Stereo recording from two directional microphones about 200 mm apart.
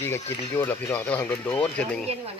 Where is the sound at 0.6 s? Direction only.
10° left (ahead or behind).